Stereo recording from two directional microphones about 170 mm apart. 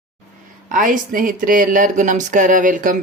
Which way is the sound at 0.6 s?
50° right (ahead or behind).